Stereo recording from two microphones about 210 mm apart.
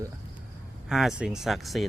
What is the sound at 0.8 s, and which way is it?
Speech, centre (ahead or behind).